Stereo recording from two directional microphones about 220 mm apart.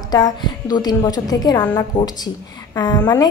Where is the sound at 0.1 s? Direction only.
20° left (ahead or behind).